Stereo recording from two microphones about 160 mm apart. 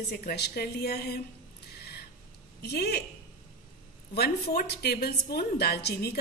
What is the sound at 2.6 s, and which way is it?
Speech, 90° left.